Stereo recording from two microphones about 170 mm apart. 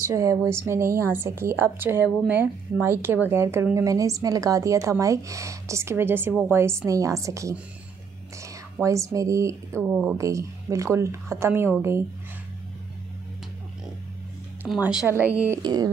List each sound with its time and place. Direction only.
0.1 s speech: 20° right (ahead or behind)
14.7 s speech: 5° right (ahead or behind)
15.6 s a sound: 25° right (ahead or behind)